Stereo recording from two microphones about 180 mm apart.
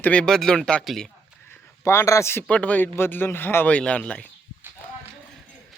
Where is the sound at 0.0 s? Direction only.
5° left (ahead or behind).